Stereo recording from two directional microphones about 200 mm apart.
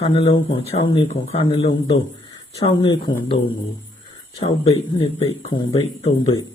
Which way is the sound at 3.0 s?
45° left (ahead or behind).